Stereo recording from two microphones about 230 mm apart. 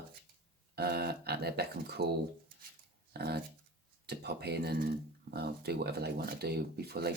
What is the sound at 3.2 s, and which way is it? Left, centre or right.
Speech, right.